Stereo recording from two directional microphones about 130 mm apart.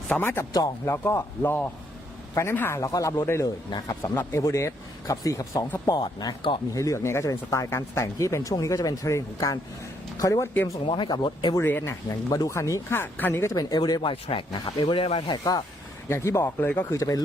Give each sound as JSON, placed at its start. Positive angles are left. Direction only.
{"t": 0.1, "sound": "speech", "side_deg": 15}
{"t": 6.7, "sound": "speech", "side_deg": 25}
{"t": 10.8, "sound": "speech", "side_deg": 40}
{"t": 11.5, "sound": "speech", "side_deg": 20}
{"t": 13.5, "sound": "speech", "side_deg": 30}
{"t": 16.0, "sound": "speech", "side_deg": 20}